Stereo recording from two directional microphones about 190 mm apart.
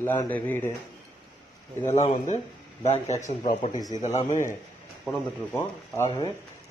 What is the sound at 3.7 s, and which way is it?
Speech, 20° left (ahead or behind).